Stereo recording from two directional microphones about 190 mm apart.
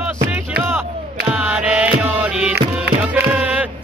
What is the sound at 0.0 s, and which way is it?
Music, 5° right (ahead or behind).